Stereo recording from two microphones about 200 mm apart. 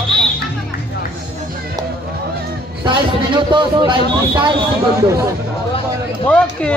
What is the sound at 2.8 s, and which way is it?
A man's voice, 25° right (ahead or behind).